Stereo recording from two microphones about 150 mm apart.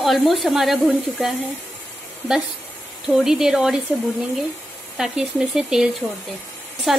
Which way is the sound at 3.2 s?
5° right (ahead or behind).